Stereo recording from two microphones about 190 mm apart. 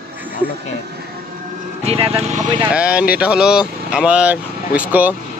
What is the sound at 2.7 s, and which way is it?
Speech, 5° right (ahead or behind).